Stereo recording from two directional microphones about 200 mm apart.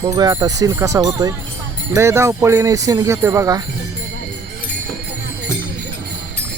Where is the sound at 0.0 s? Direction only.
15° right (ahead or behind).